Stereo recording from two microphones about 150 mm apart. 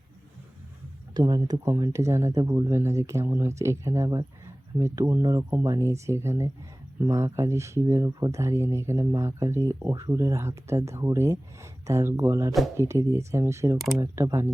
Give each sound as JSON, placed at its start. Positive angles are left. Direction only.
{"t": 1.1, "sound": "speech", "side_deg": -25}